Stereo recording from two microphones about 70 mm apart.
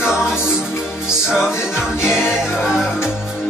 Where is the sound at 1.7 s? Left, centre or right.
Centre.